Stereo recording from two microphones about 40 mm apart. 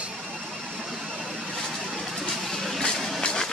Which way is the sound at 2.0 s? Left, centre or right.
Centre.